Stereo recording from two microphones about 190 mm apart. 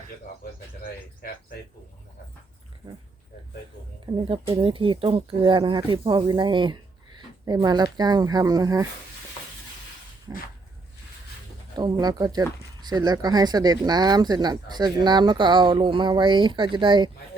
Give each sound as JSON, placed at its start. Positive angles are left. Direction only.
{"t": 4.0, "sound": "speech", "side_deg": -25}
{"t": 10.3, "sound": "dog", "side_deg": -15}
{"t": 11.8, "sound": "speech", "side_deg": -20}